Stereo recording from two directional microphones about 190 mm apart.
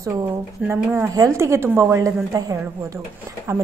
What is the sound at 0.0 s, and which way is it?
A woman's voice, 15° right (ahead or behind).